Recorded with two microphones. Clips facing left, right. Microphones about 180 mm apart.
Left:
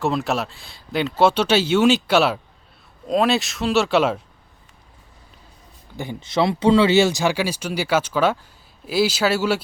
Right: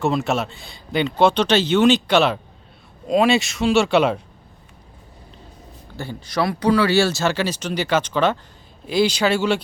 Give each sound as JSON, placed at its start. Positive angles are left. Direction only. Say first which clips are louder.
{"t": 0.0, "sound": "speech", "louder": "right 1 dB", "side_deg": 0}
{"t": 6.0, "sound": "speech", "louder": "left 2 dB", "side_deg": 20}